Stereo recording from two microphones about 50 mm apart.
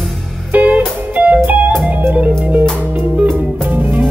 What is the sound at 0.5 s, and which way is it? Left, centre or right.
Music, right.